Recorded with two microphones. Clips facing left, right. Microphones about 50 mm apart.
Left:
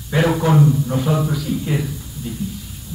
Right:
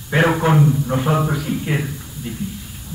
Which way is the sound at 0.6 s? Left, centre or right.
Centre.